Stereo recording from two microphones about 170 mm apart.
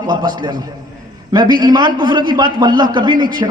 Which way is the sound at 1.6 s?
25° right (ahead or behind).